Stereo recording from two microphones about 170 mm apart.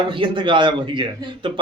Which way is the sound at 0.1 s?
30° right (ahead or behind).